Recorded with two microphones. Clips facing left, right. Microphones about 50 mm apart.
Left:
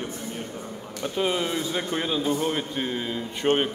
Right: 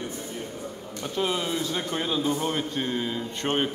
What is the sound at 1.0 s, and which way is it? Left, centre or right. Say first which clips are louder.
Speech: left 2 dB; centre.